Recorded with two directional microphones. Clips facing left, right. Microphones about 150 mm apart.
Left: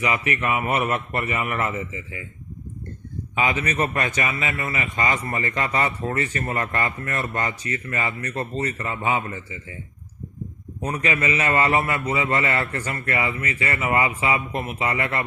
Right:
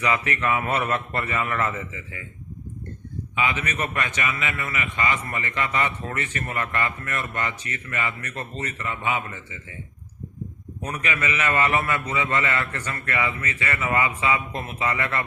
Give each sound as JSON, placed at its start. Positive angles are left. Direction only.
{"t": 0.0, "sound": "a man's voice", "side_deg": 25}
{"t": 3.3, "sound": "a man's voice", "side_deg": 40}
{"t": 10.8, "sound": "a man's voice", "side_deg": 30}